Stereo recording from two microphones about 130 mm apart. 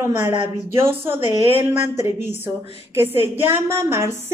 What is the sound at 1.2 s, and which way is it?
Speech, 55° left (ahead or behind).